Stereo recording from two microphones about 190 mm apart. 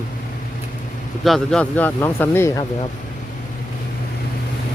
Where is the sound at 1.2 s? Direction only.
Centre (ahead or behind).